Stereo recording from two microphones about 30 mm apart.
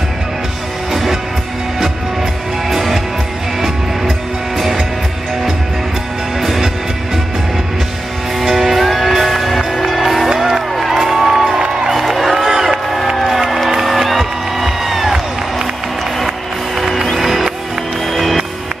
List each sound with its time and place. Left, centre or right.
2.7 s music: centre
6.4 s music: centre
8.5 s music: centre
11.0 s music: centre
11.3 s music: right
11.9 s music: centre
16.9 s music: centre